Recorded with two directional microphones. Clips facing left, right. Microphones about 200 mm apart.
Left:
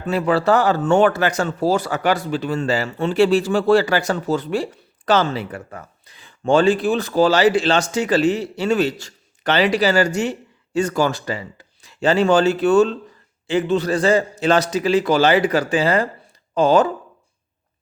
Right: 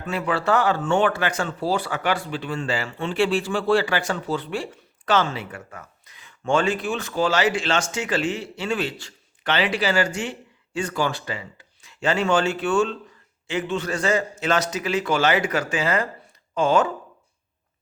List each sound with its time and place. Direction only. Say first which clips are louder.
0.0 s speech: left 6 dB; 35° left (ahead or behind)